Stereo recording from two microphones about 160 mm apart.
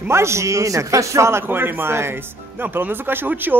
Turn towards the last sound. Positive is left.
turn(degrees=-10)  # may be behind; listen again after turning